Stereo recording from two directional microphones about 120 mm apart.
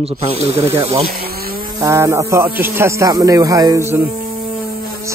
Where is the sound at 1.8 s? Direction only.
25° right (ahead or behind).